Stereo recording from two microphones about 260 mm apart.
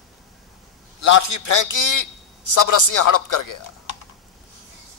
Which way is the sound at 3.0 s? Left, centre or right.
Left.